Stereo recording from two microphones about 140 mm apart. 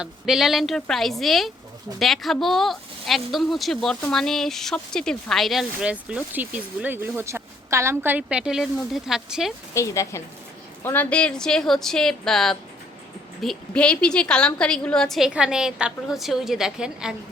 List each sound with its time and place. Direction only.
0.0 s speech: 5° right (ahead or behind)
9.7 s a woman's voice: 20° left (ahead or behind); by 17.2 s 5° right (ahead or behind)